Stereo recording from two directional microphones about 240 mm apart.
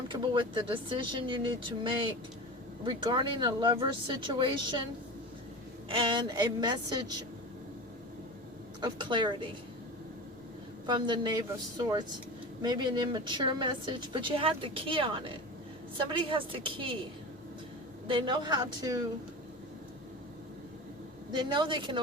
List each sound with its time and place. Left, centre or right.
0.1 s a woman's voice: centre
5.9 s a woman's voice: centre
8.8 s a woman's voice: centre
10.8 s a woman's voice: centre
18.1 s a woman's voice: centre
21.3 s a woman's voice: centre